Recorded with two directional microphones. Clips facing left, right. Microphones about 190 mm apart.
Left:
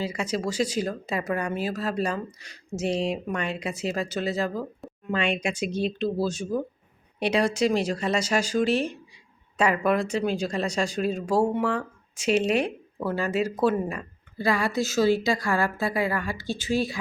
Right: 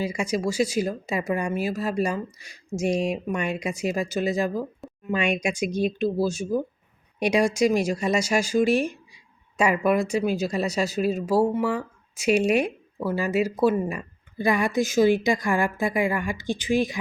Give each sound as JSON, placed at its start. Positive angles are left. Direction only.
{"t": 0.0, "sound": "speech", "side_deg": -10}